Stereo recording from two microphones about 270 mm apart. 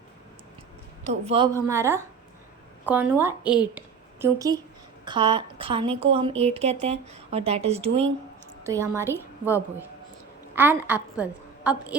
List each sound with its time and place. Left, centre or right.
1.0 s a woman's voice: right
1.6 s a woman's voice: centre
8.6 s a woman's voice: centre
10.5 s a woman's voice: centre